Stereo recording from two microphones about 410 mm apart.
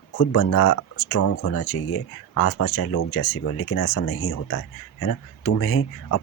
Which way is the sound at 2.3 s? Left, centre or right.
Left.